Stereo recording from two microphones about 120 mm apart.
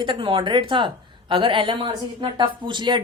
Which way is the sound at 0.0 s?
40° right (ahead or behind).